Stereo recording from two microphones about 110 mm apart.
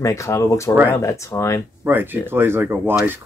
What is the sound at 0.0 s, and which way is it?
Speech, 30° left (ahead or behind).